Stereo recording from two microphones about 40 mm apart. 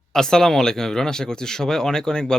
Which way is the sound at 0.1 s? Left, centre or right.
Centre.